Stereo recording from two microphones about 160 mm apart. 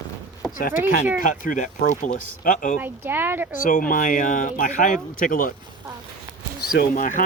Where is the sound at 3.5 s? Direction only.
55° left (ahead or behind).